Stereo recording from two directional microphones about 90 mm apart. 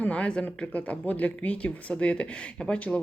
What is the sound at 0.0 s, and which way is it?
Speech, 15° left (ahead or behind).